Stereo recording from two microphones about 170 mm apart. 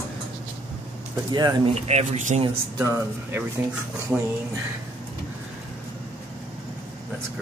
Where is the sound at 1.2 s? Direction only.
25° right (ahead or behind).